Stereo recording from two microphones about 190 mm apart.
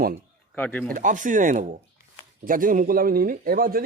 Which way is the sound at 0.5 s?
10° left (ahead or behind).